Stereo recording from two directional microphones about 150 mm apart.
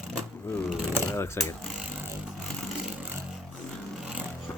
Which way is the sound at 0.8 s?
15° right (ahead or behind).